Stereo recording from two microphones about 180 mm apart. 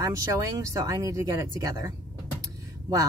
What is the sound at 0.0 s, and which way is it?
Speech, 15° right (ahead or behind).